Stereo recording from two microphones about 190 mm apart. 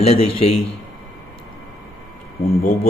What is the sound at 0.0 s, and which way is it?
Speech, 35° left (ahead or behind).